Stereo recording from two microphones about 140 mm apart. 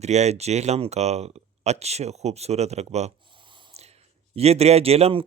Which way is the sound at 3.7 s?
50° right (ahead or behind).